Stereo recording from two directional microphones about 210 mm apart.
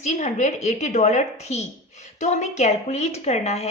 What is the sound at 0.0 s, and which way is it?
A woman's voice, 35° left (ahead or behind).